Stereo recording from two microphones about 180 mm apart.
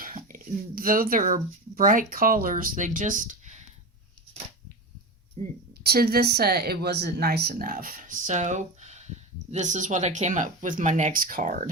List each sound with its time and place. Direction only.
0.0 s speech: 50° right (ahead or behind)
5.4 s speech: 35° right (ahead or behind)
5.8 s speech: 60° right (ahead or behind)